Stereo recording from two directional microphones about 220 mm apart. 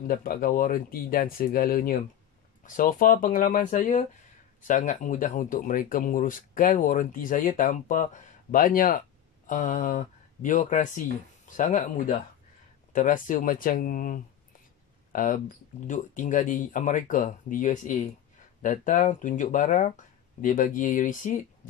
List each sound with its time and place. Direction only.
0.1 s speech: 40° left (ahead or behind)